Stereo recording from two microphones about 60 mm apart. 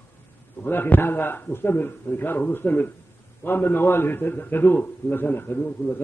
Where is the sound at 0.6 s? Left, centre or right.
Left.